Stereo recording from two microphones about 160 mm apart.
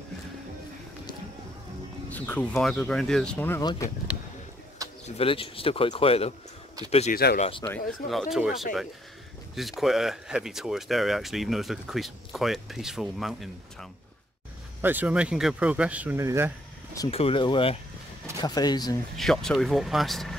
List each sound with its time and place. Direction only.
2.0 s speech: 10° left (ahead or behind)
5.0 s speech: 40° left (ahead or behind)
7.6 s speech: 5° left (ahead or behind)
9.6 s speech: centre (ahead or behind)
14.8 s speech: 10° right (ahead or behind)
17.1 s speech: 35° left (ahead or behind)
19.1 s speech: centre (ahead or behind)